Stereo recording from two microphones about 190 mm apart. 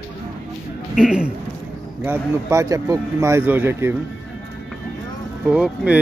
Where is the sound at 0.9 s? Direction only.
5° right (ahead or behind).